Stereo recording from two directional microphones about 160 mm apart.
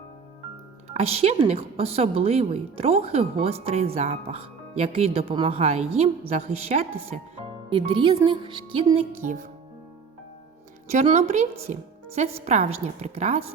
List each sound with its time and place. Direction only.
0.9 s a woman's voice: 40° right (ahead or behind)
7.7 s a woman's voice: 30° right (ahead or behind)
9.2 s speech: 50° right (ahead or behind)
11.0 s a woman's voice: 40° right (ahead or behind)